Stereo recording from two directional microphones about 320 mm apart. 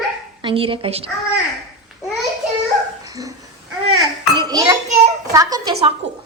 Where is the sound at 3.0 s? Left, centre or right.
Centre.